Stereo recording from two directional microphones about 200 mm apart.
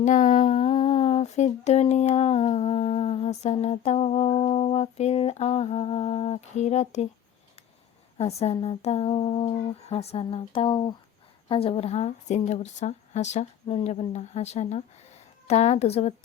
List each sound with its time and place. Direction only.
0.0 s humming: 40° left (ahead or behind)
8.2 s humming: 30° left (ahead or behind)
8.6 s speech: 30° left (ahead or behind)
11.4 s humming: 25° left (ahead or behind)